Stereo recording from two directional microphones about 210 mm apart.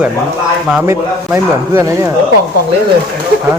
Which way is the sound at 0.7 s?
5° right (ahead or behind).